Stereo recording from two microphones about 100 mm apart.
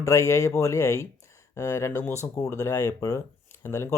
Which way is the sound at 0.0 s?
30° left (ahead or behind).